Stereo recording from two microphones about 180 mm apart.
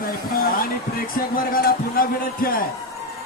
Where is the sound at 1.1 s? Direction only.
55° left (ahead or behind).